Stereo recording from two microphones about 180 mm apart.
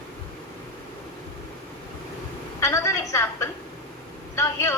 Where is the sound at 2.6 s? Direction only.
15° left (ahead or behind).